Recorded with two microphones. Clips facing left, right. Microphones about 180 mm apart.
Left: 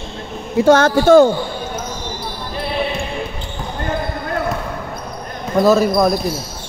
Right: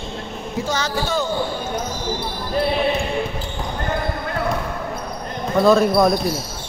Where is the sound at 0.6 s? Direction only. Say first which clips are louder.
Left 13 dB; 55° left (ahead or behind).